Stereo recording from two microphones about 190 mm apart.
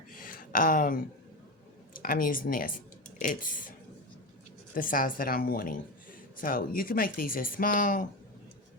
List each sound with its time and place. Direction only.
0.1 s a sound: 45° left (ahead or behind)
2.0 s speech: 45° left (ahead or behind)
4.7 s speech: 45° left (ahead or behind)